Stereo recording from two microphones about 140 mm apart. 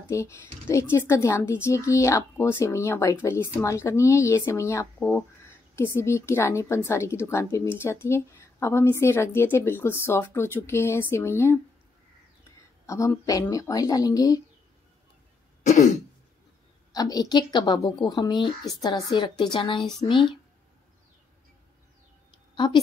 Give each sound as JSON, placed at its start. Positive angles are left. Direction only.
{"t": 0.1, "sound": "a woman's voice", "side_deg": 20}
{"t": 12.8, "sound": "a woman's voice", "side_deg": 20}
{"t": 15.6, "sound": "throat clearing", "side_deg": 60}
{"t": 16.9, "sound": "a woman's voice", "side_deg": 25}
{"t": 22.3, "sound": "a sound", "side_deg": 35}